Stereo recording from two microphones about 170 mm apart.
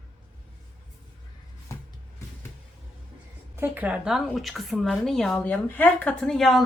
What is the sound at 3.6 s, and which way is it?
A woman's voice, 10° right (ahead or behind).